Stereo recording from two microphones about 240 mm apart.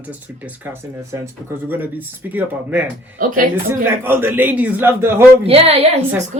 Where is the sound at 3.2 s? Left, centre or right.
Right.